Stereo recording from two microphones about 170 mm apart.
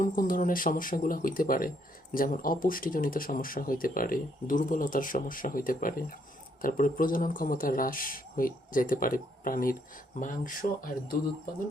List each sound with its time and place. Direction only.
0.0 s speech: 55° left (ahead or behind)